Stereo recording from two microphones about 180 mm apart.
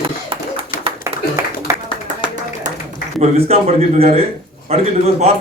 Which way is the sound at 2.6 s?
45° right (ahead or behind).